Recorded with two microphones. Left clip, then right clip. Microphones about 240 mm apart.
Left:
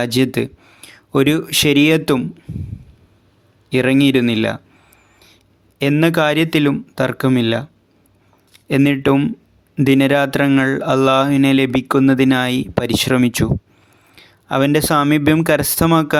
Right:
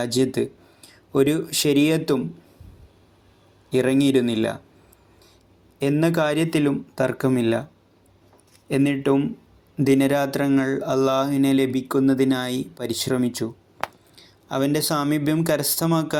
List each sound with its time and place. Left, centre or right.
0.0 s speech: left
3.7 s a man's voice: left
5.8 s speech: left
9.7 s speech: left
10.3 s speech: left
11.3 s speech: left
11.8 s speech: left
14.3 s a sound: left
14.9 s speech: left